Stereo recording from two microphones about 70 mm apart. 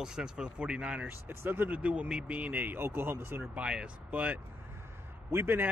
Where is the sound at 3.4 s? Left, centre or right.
Centre.